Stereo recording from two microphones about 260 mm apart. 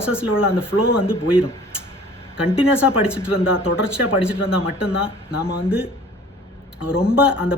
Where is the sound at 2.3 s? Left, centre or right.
Centre.